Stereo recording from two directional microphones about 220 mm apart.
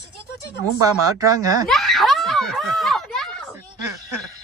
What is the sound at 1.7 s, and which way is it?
Snicker, centre (ahead or behind).